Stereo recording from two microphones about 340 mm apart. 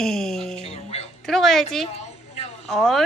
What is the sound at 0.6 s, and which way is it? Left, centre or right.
Speech, centre.